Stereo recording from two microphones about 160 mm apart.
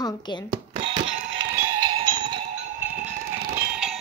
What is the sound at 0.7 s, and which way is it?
Doorbell, 35° right (ahead or behind).